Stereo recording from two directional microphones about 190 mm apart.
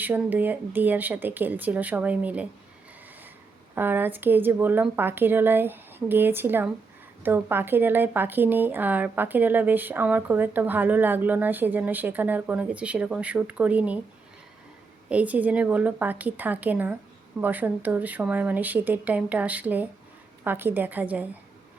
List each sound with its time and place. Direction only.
0.0 s speech: 10° right (ahead or behind)
3.8 s speech: 10° right (ahead or behind)
15.1 s speech: 10° right (ahead or behind)